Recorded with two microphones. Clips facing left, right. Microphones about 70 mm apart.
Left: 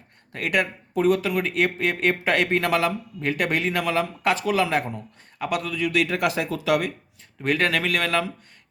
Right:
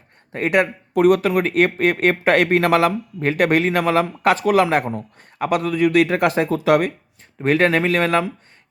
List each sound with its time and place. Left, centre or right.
0.3 s speech: right
0.9 s speech: right
1.3 s speech: right
7.4 s speech: right